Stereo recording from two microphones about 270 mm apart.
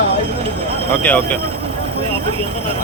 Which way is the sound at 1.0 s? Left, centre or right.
Centre.